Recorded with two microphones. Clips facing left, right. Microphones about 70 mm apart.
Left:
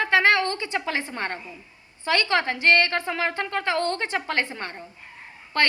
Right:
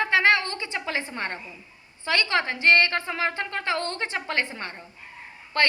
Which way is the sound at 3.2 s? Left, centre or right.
Left.